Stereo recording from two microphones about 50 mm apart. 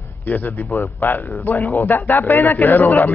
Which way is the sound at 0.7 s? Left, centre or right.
Left.